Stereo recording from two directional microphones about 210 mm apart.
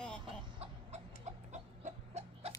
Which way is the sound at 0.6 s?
30° right (ahead or behind).